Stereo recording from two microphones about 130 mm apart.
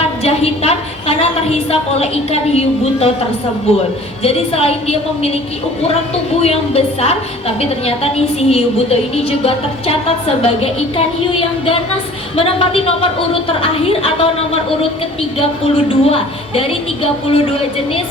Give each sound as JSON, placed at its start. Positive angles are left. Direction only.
{"t": 0.2, "sound": "a woman's voice", "side_deg": 50}
{"t": 6.4, "sound": "a woman's voice", "side_deg": 50}